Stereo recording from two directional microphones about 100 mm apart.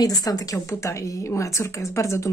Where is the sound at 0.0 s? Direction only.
40° left (ahead or behind).